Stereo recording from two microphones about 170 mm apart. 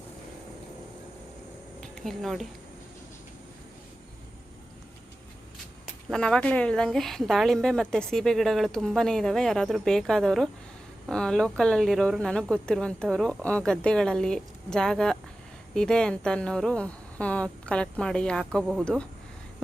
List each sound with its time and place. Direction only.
1.8 s speech: centre (ahead or behind)
6.1 s a woman's voice: 5° left (ahead or behind)